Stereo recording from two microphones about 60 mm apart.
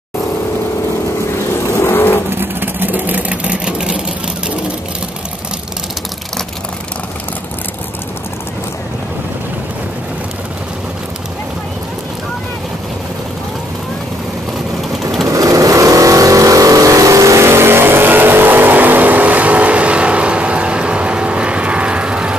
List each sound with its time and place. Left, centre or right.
1.9 s vehicle: left
2.3 s sewing machine: right; by 4.0 s centre
15.2 s vehicle: right
17.5 s vehicle: right; by 22.3 s centre